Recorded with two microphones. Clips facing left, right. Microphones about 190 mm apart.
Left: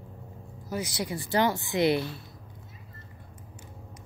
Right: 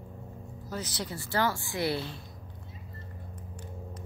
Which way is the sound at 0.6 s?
10° left (ahead or behind).